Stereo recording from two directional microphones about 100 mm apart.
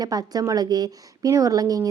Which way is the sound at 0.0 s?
40° right (ahead or behind).